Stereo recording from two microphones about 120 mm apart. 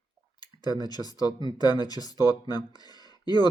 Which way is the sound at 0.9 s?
35° left (ahead or behind).